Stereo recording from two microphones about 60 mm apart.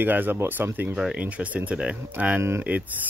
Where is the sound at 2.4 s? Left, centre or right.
Right.